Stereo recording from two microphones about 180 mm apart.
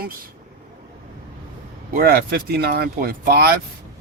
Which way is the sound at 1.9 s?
55° right (ahead or behind).